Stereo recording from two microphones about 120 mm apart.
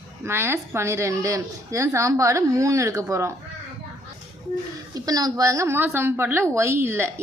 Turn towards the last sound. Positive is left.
turn(degrees=-20)  # may be behind; listen again after turning